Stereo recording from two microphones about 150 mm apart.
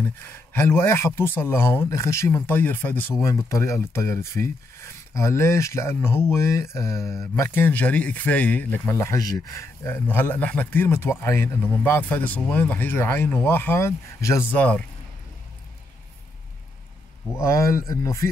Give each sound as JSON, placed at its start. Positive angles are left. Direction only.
{"t": 0.2, "sound": "speech", "side_deg": 15}
{"t": 17.3, "sound": "speech", "side_deg": 20}